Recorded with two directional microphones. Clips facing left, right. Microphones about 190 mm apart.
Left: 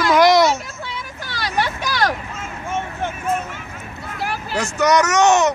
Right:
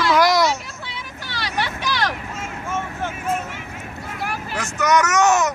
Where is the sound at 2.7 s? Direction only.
20° left (ahead or behind).